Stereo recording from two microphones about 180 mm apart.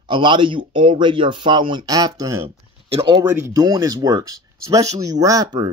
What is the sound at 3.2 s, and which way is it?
Speech, 15° right (ahead or behind).